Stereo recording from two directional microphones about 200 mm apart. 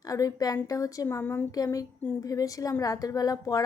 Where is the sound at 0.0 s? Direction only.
15° left (ahead or behind).